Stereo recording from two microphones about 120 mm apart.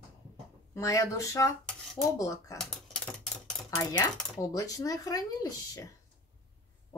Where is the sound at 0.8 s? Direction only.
25° left (ahead or behind).